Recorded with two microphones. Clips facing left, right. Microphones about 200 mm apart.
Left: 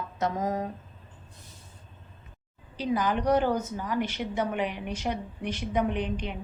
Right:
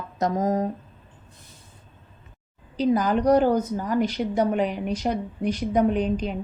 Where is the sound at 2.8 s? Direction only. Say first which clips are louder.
Right 6 dB; 40° right (ahead or behind).